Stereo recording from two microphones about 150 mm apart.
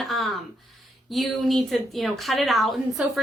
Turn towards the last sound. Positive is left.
turn(degrees=0)  # may be behind; listen again after turning